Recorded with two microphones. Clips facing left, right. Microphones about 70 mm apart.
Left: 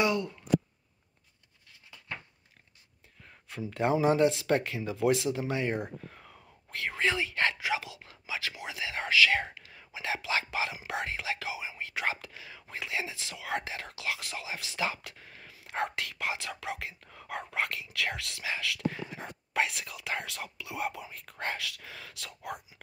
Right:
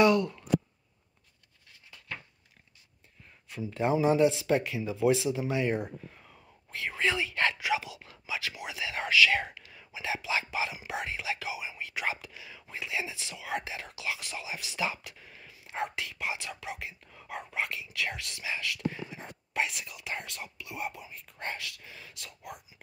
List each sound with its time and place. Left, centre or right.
0.0 s a sound: left
3.7 s speech: left
5.5 s speech: left
6.0 s whispering: left
6.9 s speech: left
13.3 s speech: left